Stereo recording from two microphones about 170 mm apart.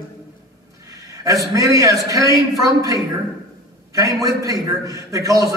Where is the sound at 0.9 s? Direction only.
20° right (ahead or behind).